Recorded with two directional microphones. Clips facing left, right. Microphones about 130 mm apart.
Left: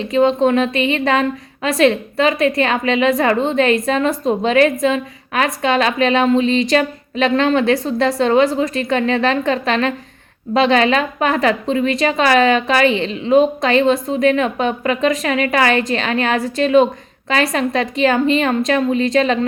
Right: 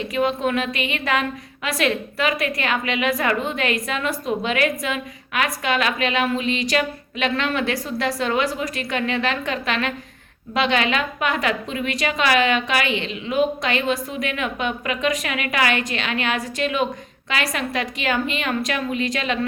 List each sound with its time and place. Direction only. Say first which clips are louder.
0.0 s a woman's voice: left 8 dB; 30° left (ahead or behind)